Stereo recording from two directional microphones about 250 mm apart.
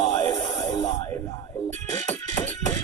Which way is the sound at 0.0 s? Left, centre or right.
Left.